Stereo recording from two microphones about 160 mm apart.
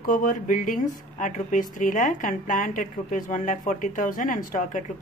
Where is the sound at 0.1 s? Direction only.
55° left (ahead or behind).